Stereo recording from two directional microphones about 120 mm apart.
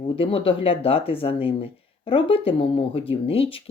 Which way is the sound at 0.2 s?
50° left (ahead or behind).